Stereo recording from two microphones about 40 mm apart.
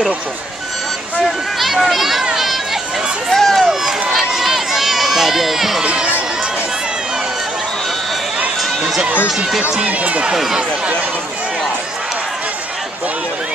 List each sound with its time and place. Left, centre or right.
1.2 s speech: centre
2.3 s a sound: centre
3.3 s run: centre
4.1 s run: centre
9.8 s speech: right
10.3 s speech: centre